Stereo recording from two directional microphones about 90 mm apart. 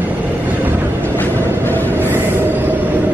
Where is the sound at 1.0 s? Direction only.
20° left (ahead or behind).